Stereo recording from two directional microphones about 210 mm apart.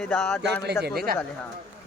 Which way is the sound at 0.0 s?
5° left (ahead or behind).